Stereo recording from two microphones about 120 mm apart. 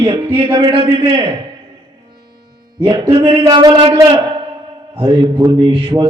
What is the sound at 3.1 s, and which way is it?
A man's voice, 45° right (ahead or behind).